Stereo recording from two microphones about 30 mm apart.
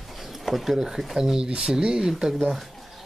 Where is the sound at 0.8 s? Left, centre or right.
Centre.